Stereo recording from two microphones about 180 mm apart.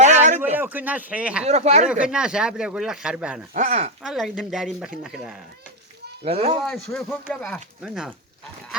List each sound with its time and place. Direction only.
0.0 s a sound: 40° right (ahead or behind)
0.5 s speech: 10° right (ahead or behind)
1.5 s speech: 35° right (ahead or behind)
1.9 s speech: 5° right (ahead or behind)
3.5 s speech: 40° right (ahead or behind)
4.0 s speech: centre (ahead or behind)
6.2 s speech: 35° right (ahead or behind)
6.7 s speech: 5° left (ahead or behind)